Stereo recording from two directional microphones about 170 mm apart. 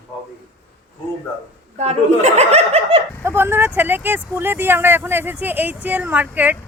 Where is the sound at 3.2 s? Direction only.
15° right (ahead or behind).